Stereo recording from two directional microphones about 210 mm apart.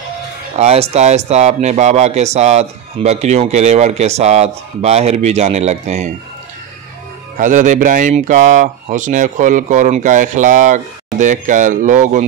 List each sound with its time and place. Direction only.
0.6 s speech: 30° right (ahead or behind)
7.3 s speech: 40° right (ahead or behind)